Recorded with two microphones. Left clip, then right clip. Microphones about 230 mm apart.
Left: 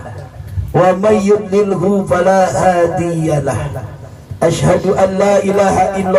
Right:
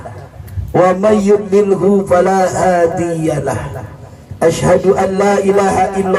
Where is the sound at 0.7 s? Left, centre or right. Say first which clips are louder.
Even; right.